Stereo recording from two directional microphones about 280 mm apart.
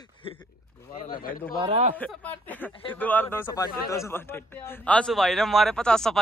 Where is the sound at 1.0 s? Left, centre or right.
Left.